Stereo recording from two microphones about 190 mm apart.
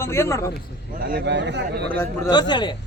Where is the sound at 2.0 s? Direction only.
20° left (ahead or behind).